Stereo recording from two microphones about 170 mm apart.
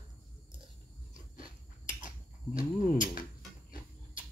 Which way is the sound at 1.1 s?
50° left (ahead or behind).